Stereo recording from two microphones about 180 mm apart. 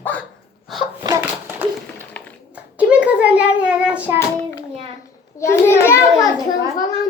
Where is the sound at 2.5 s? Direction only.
5° right (ahead or behind).